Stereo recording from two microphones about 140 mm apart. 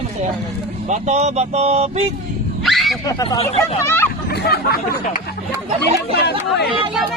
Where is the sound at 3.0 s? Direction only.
30° left (ahead or behind).